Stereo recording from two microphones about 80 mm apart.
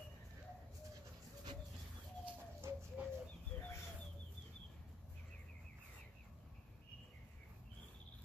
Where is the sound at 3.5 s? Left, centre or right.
Left.